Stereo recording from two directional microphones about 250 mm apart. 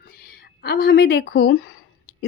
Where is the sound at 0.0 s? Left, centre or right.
Left.